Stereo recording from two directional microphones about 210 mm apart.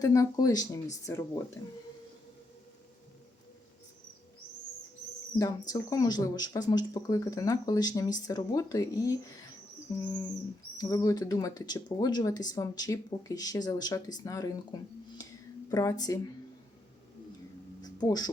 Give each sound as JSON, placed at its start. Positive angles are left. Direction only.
{"t": 0.0, "sound": "speech", "side_deg": 15}
{"t": 5.4, "sound": "speech", "side_deg": 15}
{"t": 10.8, "sound": "speech", "side_deg": 15}
{"t": 17.8, "sound": "a sound", "side_deg": 20}